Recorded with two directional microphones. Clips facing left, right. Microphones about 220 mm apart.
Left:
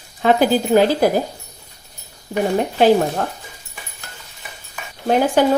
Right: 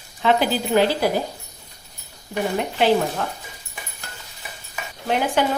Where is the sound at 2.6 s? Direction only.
40° left (ahead or behind).